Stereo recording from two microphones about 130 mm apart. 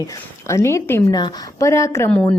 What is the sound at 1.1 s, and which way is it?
A woman's voice, 35° left (ahead or behind).